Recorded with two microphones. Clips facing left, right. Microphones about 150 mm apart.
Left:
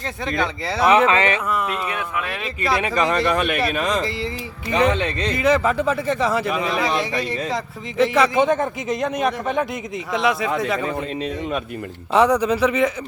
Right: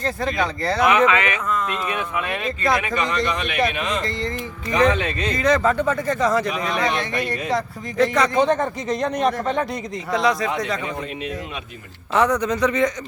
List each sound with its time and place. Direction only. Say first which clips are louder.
0.0 s a man's voice: right 1 dB; centre (ahead or behind)
0.8 s speech: left 2 dB; 30° left (ahead or behind)
1.5 s a man's voice: even; 10° left (ahead or behind)
2.7 s speech: left 2 dB; 35° left (ahead or behind)
3.1 s speech: left 4 dB; 50° left (ahead or behind)
3.7 s speech: left 3 dB; 40° left (ahead or behind)
4.7 s speech: even; 30° left (ahead or behind)
5.3 s a man's voice: even; 10° left (ahead or behind)
12.1 s speech: left 3 dB; 10° left (ahead or behind)